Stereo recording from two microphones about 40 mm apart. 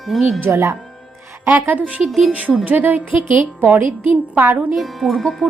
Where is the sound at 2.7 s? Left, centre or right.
Right.